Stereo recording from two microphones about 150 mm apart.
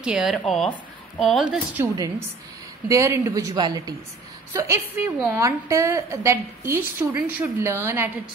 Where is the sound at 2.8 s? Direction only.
20° right (ahead or behind).